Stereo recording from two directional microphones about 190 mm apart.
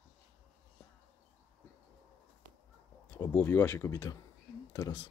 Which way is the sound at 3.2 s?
15° left (ahead or behind).